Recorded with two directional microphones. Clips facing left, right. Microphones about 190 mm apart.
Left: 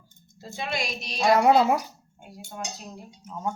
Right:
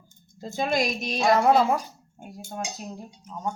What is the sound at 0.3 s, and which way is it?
Speech, 40° right (ahead or behind).